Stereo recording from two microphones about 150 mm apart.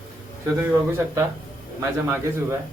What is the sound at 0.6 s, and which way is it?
Speech, 15° right (ahead or behind).